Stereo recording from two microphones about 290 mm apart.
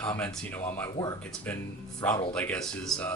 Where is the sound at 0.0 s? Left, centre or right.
Centre.